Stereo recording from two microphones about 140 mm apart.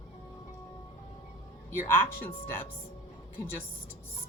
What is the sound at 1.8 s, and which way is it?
Speech, 15° left (ahead or behind).